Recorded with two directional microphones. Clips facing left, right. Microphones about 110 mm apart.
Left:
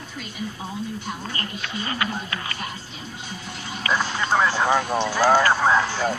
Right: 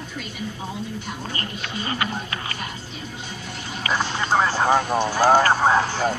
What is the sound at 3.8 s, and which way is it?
Speech, 30° right (ahead or behind).